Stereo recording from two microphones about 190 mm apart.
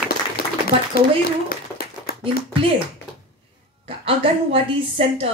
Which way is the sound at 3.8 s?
30° right (ahead or behind).